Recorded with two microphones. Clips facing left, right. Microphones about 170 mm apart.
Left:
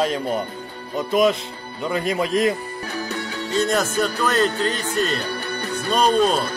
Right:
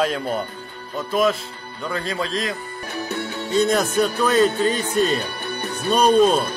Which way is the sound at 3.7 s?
Centre (ahead or behind).